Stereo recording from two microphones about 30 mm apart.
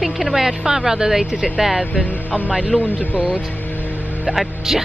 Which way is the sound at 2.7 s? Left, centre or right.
Left.